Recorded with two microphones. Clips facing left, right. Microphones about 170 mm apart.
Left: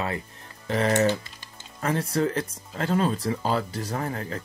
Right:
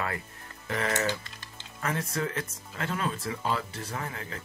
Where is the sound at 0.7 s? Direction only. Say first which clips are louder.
Left 7 dB; 30° left (ahead or behind).